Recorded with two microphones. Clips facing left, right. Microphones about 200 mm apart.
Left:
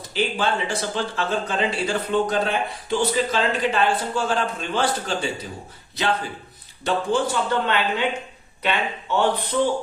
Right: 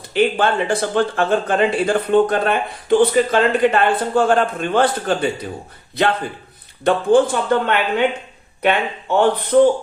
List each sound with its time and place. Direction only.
0.1 s speech: 60° right (ahead or behind)
6.8 s speech: 50° right (ahead or behind)